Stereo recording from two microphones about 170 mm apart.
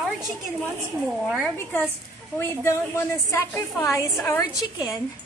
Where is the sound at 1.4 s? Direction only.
10° left (ahead or behind).